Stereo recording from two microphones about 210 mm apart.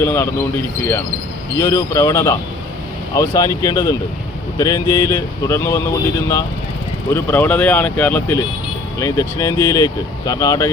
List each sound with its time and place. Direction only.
0.0 s speech: 10° left (ahead or behind)
1.5 s speech: 15° left (ahead or behind)
7.1 s speech: 10° left (ahead or behind)